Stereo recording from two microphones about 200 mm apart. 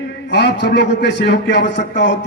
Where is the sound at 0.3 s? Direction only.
60° left (ahead or behind).